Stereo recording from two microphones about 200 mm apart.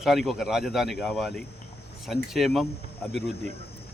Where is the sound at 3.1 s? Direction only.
55° left (ahead or behind).